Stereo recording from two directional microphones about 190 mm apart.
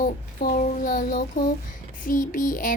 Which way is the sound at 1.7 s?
45° left (ahead or behind).